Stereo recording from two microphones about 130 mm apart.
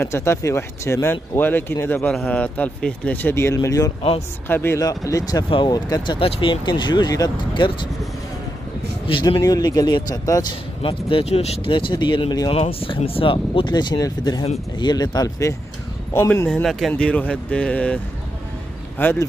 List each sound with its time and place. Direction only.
0.0 s speech: 20° left (ahead or behind)
2.0 s speech: 10° left (ahead or behind); by 6.1 s 30° left (ahead or behind)
6.1 s speech: 40° left (ahead or behind)
9.0 s speech: 40° left (ahead or behind)
9.4 s speech: 30° left (ahead or behind)
10.8 s speech: 45° left (ahead or behind); by 16.4 s 20° left (ahead or behind)
16.4 s speech: 5° left (ahead or behind)
18.9 s speech: 15° left (ahead or behind)